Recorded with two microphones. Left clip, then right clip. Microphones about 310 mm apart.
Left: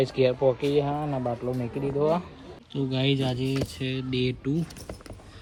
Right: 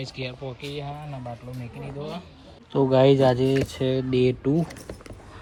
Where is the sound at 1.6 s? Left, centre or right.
Centre.